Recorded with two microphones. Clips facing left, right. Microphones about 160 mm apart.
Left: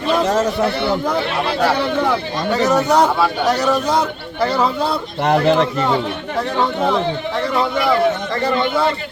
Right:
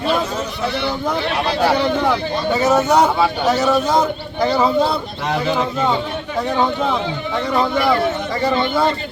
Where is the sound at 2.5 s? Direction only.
5° right (ahead or behind).